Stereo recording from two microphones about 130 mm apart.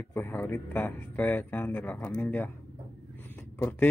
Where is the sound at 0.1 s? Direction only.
15° left (ahead or behind).